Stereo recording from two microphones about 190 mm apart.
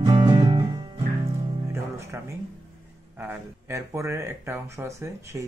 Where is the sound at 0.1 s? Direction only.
25° right (ahead or behind).